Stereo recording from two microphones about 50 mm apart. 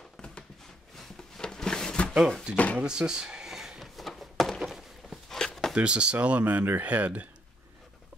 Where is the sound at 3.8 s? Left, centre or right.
Centre.